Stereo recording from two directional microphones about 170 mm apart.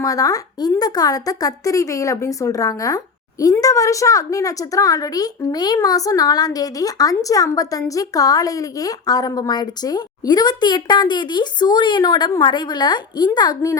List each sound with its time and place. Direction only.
0.0 s a woman's voice: 20° left (ahead or behind)